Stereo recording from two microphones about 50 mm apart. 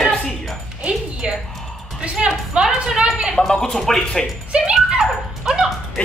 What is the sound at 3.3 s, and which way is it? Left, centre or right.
Speech, centre.